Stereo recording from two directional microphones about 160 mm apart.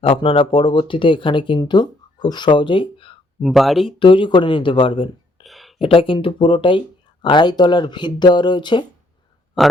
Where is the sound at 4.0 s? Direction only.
30° left (ahead or behind).